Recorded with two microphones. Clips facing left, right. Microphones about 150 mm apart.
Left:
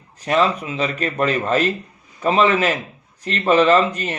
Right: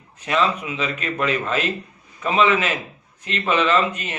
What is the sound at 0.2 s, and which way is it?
Speech, 40° left (ahead or behind).